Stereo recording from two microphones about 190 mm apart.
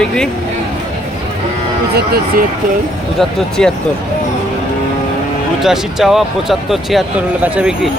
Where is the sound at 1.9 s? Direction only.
55° right (ahead or behind).